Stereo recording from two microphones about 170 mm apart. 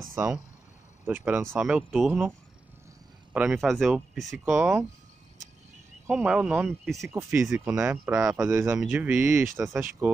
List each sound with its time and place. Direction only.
0.1 s speech: 10° right (ahead or behind)
3.3 s speech: 5° right (ahead or behind)
6.0 s speech: 5° right (ahead or behind)